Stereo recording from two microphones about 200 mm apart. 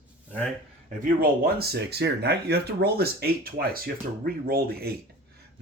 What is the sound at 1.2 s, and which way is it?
Speech, 50° right (ahead or behind).